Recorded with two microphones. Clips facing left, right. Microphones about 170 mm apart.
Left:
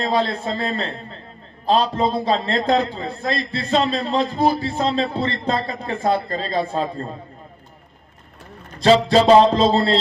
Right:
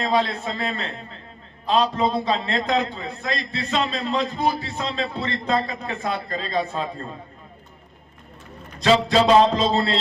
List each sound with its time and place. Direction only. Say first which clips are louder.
0.0 s a man's voice: left 1 dB; 35° left (ahead or behind)
8.8 s a man's voice: left 4 dB; 35° left (ahead or behind)